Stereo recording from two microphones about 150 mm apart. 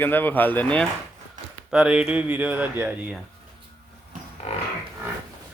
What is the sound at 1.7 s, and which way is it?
Speech, 5° right (ahead or behind).